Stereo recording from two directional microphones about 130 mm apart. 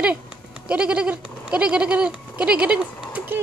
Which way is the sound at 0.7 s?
10° right (ahead or behind).